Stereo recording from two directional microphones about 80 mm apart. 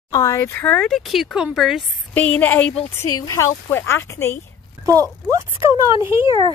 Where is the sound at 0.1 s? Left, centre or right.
Left.